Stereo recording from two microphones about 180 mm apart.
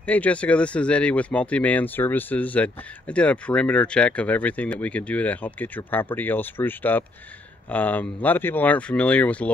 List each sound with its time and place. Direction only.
0.0 s speech: 10° left (ahead or behind)